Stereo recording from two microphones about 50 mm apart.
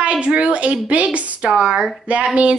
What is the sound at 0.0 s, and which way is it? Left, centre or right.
A woman's voice, right.